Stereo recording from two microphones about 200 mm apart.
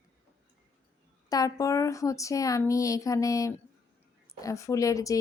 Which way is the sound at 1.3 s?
15° left (ahead or behind).